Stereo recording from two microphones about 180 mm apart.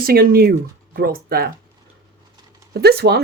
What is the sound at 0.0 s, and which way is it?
Speech, 55° right (ahead or behind).